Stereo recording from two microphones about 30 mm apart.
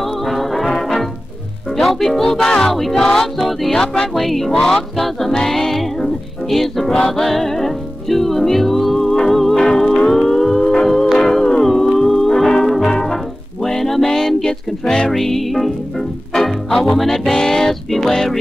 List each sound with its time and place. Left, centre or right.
0.3 s music: centre
1.8 s music: centre
2.2 s music: centre
3.3 s music: centre
3.7 s music: left
4.1 s music: centre
4.5 s music: centre
5.7 s music: centre
7.2 s music: centre
10.6 s music: left
11.6 s howl: centre
12.0 s music: centre
15.0 s music: centre